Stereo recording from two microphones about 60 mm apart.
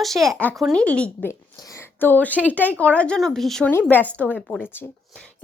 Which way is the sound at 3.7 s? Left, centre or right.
Left.